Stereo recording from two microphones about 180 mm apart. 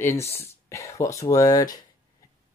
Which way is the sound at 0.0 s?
15° left (ahead or behind).